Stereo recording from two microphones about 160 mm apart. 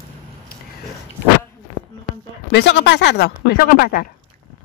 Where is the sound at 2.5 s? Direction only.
90° left; by 4.1 s 70° left (ahead or behind).